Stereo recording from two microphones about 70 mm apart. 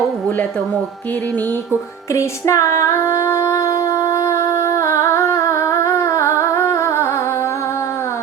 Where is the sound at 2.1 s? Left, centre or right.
Left.